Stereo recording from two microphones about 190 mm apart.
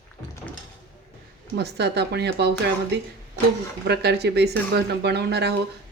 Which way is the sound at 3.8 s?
60° right (ahead or behind).